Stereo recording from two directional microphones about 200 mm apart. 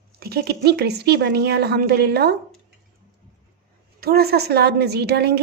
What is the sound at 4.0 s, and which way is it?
Speech, 50° right (ahead or behind).